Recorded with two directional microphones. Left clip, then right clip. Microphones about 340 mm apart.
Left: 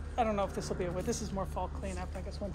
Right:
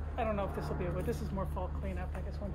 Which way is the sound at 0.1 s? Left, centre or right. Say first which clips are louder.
Left 4 dB; left.